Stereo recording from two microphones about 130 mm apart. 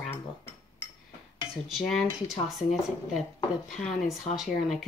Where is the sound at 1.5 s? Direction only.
Centre (ahead or behind).